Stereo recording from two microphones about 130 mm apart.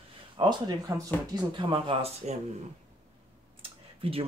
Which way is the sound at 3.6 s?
45° right (ahead or behind).